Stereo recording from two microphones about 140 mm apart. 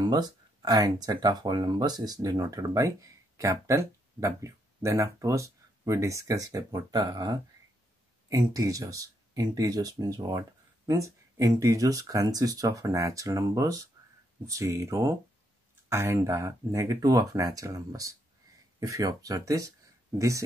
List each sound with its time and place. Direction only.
0.0 s speech: 30° right (ahead or behind)